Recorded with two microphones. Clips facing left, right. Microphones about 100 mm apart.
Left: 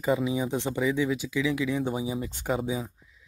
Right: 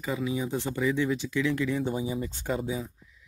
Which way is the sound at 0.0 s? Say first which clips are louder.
Left 4 dB; 20° left (ahead or behind).